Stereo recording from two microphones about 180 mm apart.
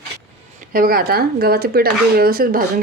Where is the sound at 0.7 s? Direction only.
55° right (ahead or behind).